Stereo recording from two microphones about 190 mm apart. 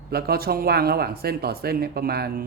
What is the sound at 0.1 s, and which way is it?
Speech, 55° right (ahead or behind).